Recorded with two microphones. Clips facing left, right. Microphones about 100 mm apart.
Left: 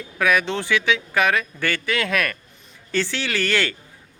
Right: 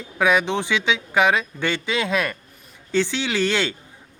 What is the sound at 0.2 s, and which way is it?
Speech, 20° right (ahead or behind).